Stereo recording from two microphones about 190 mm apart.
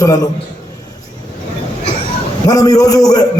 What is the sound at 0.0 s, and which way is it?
Speech, 20° left (ahead or behind).